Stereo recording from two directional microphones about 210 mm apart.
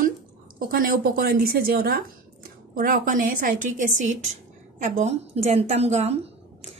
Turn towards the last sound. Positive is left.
turn(degrees=-30)  # may be behind; listen again after turning